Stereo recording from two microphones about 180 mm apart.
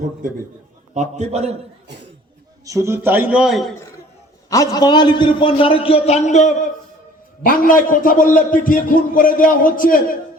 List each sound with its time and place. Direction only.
0.9 s a man's voice: 40° right (ahead or behind)
2.6 s a man's voice: 15° right (ahead or behind); by 3.8 s centre (ahead or behind)
4.4 s a man's voice: 20° left (ahead or behind); by 10.2 s 50° left (ahead or behind)